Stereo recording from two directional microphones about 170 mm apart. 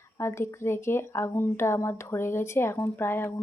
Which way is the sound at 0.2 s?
15° left (ahead or behind).